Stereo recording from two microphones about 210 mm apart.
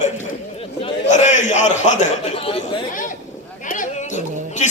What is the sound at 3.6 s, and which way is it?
Chatter, 40° left (ahead or behind).